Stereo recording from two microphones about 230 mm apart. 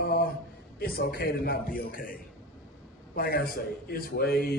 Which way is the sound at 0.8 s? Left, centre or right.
Left.